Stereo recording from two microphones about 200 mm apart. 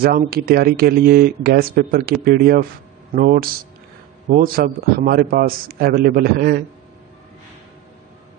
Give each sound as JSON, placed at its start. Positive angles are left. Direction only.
{"t": 0.0, "sound": "a man's voice", "side_deg": -50}